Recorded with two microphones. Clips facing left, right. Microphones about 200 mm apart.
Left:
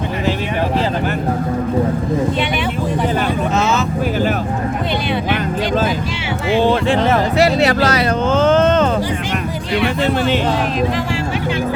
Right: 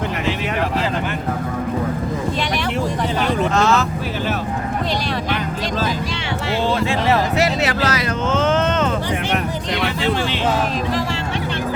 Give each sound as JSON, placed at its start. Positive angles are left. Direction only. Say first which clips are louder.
{"t": 3.6, "sound": "vehicle", "louder": "right 2 dB", "side_deg": 0}
{"t": 6.8, "sound": "music", "louder": "left 4 dB", "side_deg": 55}
{"t": 7.3, "sound": "a sound", "louder": "left 5 dB", "side_deg": 30}